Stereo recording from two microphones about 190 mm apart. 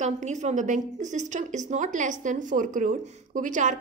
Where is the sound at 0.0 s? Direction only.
40° right (ahead or behind).